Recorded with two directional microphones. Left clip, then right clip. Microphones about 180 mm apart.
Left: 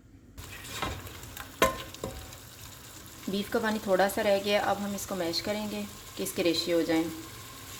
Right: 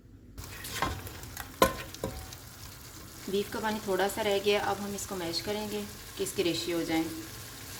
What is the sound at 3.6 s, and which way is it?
Frying, 40° left (ahead or behind).